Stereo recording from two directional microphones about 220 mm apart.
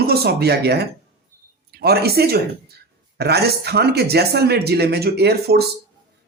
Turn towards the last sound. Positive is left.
turn(degrees=-45)  # may be behind; listen again after turning